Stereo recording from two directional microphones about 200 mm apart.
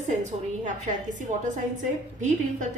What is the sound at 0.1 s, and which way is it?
Speech, 40° right (ahead or behind).